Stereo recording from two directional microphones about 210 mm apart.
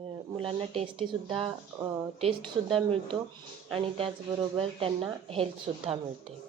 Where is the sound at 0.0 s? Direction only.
25° right (ahead or behind).